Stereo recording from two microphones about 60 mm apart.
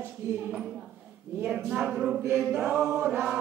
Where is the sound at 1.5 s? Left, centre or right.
Centre.